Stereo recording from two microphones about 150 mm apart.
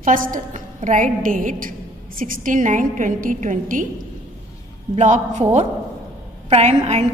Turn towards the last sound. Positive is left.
turn(degrees=-50)  # may be behind; listen again after turning